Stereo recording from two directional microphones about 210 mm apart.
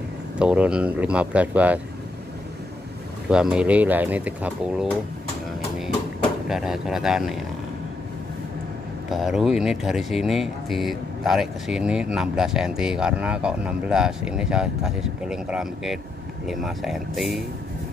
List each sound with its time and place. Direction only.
0.4 s speech: 5° right (ahead or behind)
3.3 s speech: 5° right (ahead or behind)
6.5 s speech: centre (ahead or behind)
9.1 s speech: centre (ahead or behind)